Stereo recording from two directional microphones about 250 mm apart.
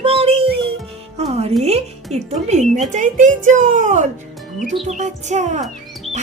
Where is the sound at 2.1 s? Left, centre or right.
Right.